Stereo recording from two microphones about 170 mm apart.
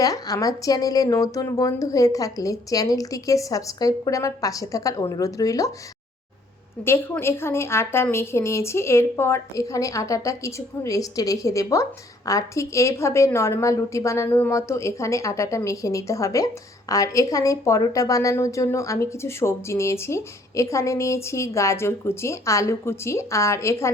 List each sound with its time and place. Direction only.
0.0 s speech: 20° left (ahead or behind)
6.8 s a woman's voice: 15° left (ahead or behind)